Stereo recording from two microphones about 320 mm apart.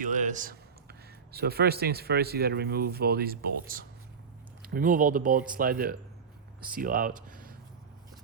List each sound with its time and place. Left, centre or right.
0.0 s speech: right